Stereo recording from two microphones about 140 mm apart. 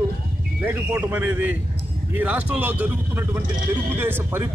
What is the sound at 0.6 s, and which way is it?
A man's voice, 15° right (ahead or behind).